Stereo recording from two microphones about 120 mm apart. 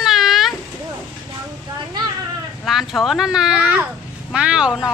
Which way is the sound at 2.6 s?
Centre (ahead or behind).